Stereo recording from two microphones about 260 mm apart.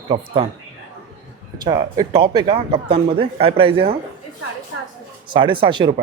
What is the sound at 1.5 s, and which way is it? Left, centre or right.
Speech, centre.